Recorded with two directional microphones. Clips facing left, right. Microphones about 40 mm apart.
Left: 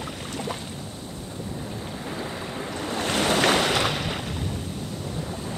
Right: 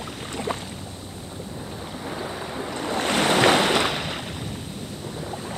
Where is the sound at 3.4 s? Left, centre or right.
Centre.